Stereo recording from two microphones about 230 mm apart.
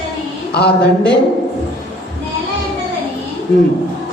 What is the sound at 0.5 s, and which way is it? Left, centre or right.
Speech, left.